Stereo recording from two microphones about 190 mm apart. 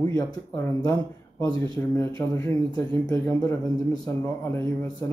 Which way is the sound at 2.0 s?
15° left (ahead or behind).